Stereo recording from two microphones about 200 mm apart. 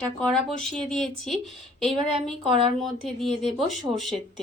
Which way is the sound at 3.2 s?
Centre (ahead or behind).